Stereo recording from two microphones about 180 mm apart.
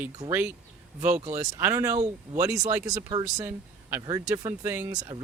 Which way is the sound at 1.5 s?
10° right (ahead or behind).